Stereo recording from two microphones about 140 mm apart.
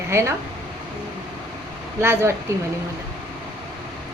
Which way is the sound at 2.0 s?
20° right (ahead or behind).